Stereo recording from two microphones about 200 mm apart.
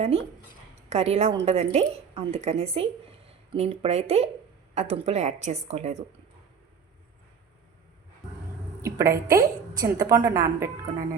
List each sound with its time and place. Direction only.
0.0 s a woman's voice: 30° right (ahead or behind)
8.8 s a woman's voice: 15° right (ahead or behind)